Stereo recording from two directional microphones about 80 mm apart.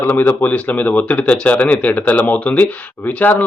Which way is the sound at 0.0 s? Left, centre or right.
Left.